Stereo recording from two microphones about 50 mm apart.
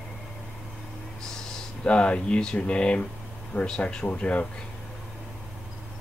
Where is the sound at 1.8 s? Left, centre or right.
Left.